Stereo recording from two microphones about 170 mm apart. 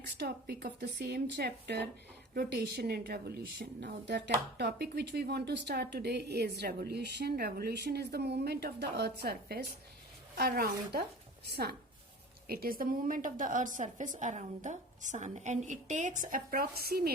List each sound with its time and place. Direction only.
0.2 s a woman's voice: 70° right (ahead or behind)
12.5 s a woman's voice: 60° right (ahead or behind)